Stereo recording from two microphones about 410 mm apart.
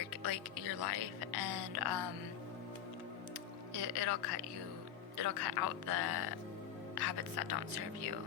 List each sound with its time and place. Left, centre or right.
0.0 s music: right
3.8 s a man's voice: right